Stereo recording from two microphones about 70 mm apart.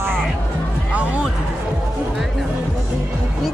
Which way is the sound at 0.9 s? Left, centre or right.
Centre.